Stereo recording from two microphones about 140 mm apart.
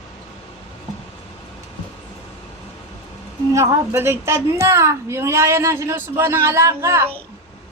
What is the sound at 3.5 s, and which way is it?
A woman's voice, 20° right (ahead or behind).